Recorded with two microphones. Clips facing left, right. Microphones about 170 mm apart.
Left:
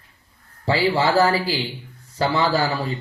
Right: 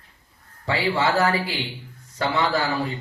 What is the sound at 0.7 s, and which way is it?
Speech, 30° left (ahead or behind).